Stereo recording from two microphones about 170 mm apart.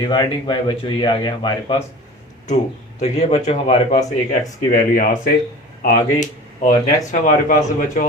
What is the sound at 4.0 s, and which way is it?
Speech, 20° left (ahead or behind).